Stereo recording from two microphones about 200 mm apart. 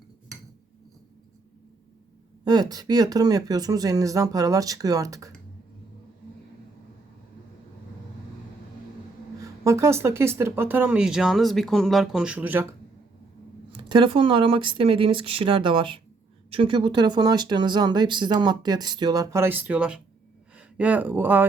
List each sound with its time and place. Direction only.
2.4 s speech: 20° right (ahead or behind)
9.4 s speech: 15° right (ahead or behind)
13.7 s speech: 25° right (ahead or behind)